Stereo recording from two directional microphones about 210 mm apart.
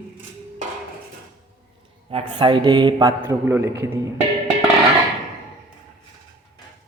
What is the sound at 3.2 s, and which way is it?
Speech, 10° right (ahead or behind).